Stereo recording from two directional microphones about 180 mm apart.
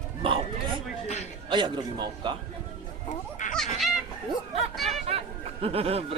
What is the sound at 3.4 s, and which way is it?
Music, 45° left (ahead or behind).